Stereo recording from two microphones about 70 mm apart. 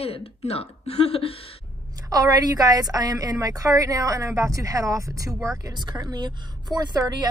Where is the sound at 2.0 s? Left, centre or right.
Right.